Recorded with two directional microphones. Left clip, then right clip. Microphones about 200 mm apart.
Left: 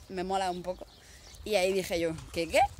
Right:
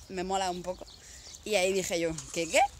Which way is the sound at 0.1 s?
Centre (ahead or behind).